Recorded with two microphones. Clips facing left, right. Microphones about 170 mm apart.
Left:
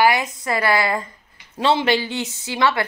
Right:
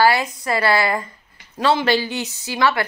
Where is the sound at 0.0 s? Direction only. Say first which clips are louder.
Right 1 dB; 20° left (ahead or behind).